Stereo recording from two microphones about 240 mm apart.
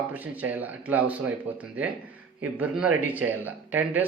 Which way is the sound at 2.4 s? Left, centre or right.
Centre.